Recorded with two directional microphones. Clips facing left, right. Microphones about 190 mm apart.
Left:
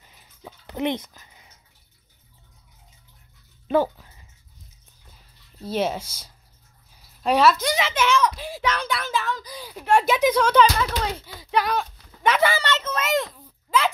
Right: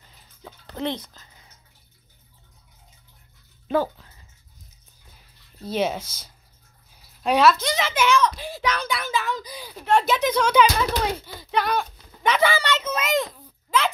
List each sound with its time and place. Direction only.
0.7 s speech: 20° left (ahead or behind)
3.7 s dog: 15° left (ahead or behind)
5.6 s speech: 5° left (ahead or behind)
7.2 s speech: centre (ahead or behind)
9.0 s a sound: 10° right (ahead or behind)
9.8 s speech: 10° left (ahead or behind)
10.5 s speech: 10° right (ahead or behind)
11.3 s a sound: centre (ahead or behind)